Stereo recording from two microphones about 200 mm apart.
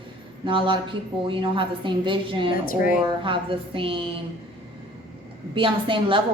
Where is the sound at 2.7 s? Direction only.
45° left (ahead or behind).